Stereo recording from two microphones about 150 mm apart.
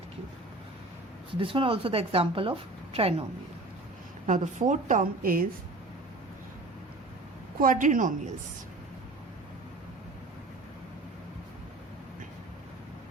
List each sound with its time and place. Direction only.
1.3 s speech: 35° right (ahead or behind)
4.6 s a woman's voice: 55° right (ahead or behind)
7.6 s a woman's voice: 60° right (ahead or behind)